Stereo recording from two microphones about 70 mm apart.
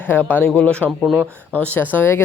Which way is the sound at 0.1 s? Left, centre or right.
Left.